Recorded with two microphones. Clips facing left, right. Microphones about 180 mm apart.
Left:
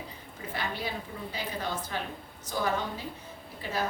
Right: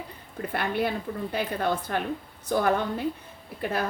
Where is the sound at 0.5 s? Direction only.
60° right (ahead or behind).